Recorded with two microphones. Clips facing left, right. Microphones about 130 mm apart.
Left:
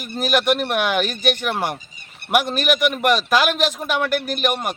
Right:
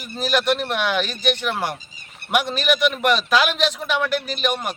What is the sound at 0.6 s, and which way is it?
A man's voice, 50° left (ahead or behind).